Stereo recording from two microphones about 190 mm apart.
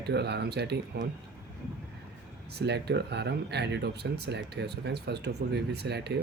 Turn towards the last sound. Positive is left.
turn(degrees=-60)  # may be behind; listen again after turning